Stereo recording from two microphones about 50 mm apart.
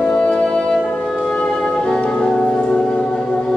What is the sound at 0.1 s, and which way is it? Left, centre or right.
Music, centre.